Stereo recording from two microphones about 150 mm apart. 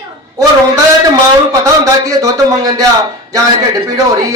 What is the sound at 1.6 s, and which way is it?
Speech, 20° right (ahead or behind).